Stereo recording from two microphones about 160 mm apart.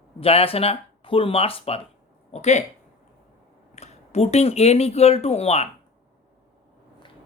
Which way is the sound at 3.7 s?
45° left (ahead or behind).